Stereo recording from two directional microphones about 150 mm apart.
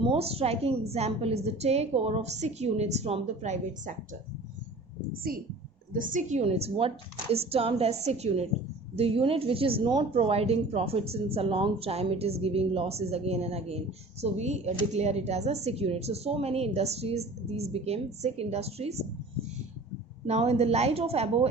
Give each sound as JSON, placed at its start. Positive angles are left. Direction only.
{"t": 0.0, "sound": "a woman's voice", "side_deg": -40}
{"t": 5.9, "sound": "a woman's voice", "side_deg": -65}
{"t": 20.2, "sound": "a woman's voice", "side_deg": -45}